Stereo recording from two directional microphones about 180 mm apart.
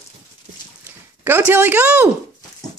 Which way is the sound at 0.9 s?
10° right (ahead or behind).